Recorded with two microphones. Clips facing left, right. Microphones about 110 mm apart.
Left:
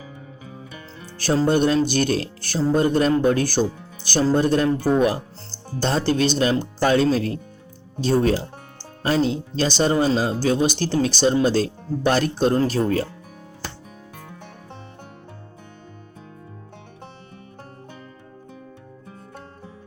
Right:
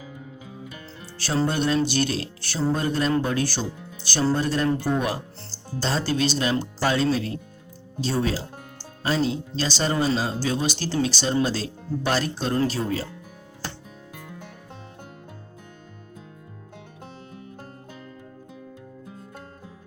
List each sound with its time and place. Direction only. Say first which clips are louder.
1.5 s speech: left 6 dB; 50° left (ahead or behind)